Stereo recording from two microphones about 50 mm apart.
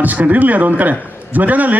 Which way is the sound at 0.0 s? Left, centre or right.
Right.